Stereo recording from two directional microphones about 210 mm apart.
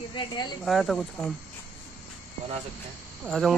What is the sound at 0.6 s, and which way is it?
Speech, centre (ahead or behind).